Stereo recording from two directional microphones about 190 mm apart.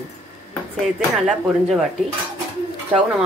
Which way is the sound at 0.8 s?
Centre (ahead or behind).